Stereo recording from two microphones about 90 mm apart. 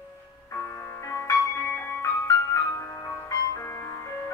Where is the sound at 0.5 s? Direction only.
35° left (ahead or behind).